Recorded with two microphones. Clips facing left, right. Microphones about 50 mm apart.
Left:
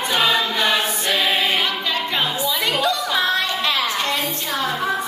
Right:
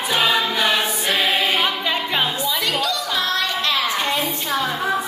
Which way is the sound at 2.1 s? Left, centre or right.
Centre.